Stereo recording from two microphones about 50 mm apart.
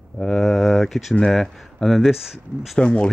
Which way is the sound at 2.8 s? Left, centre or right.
Centre.